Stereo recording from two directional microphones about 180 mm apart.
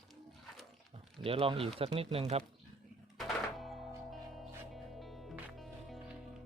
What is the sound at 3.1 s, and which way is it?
Music, centre (ahead or behind).